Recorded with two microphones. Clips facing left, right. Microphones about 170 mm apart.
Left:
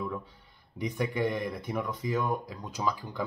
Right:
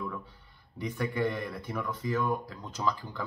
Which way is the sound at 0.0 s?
15° left (ahead or behind).